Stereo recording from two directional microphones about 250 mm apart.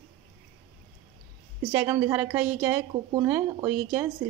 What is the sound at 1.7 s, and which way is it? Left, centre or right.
A woman's voice, centre.